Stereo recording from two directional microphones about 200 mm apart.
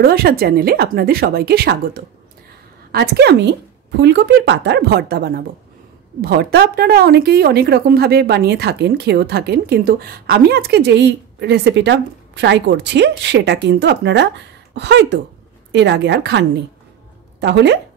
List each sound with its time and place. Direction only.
0.0 s a woman's voice: 50° right (ahead or behind)